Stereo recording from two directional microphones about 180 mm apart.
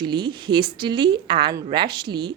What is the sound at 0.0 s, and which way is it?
A woman's voice, 25° right (ahead or behind).